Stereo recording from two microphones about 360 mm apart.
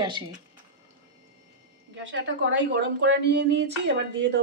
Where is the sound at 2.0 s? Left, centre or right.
Right.